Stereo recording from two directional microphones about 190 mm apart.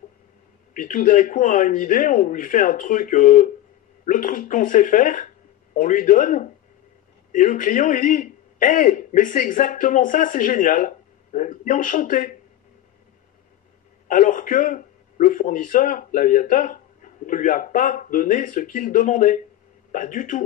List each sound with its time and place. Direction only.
0.7 s a man's voice: 45° left (ahead or behind)
14.0 s a man's voice: 45° left (ahead or behind)